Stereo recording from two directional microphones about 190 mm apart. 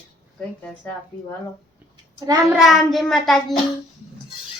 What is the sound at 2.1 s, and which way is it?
Speech, 20° right (ahead or behind).